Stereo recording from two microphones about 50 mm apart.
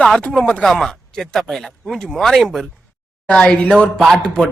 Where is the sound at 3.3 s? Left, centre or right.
Left.